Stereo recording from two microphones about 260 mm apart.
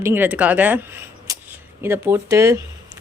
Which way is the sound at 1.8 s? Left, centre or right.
Centre.